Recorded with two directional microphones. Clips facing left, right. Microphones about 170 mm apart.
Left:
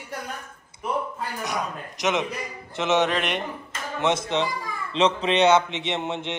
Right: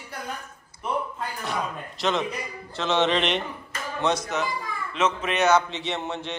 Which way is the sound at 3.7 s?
20° left (ahead or behind).